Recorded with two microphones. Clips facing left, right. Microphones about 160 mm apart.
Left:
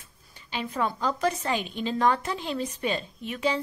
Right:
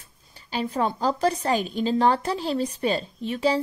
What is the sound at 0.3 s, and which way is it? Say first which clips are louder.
A woman's voice: right 5 dB; 35° right (ahead or behind).